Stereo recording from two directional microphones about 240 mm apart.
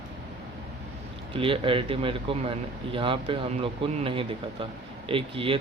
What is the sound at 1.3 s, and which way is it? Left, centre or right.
Speech, right.